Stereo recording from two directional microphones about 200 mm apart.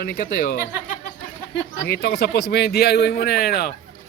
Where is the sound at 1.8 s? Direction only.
55° left (ahead or behind).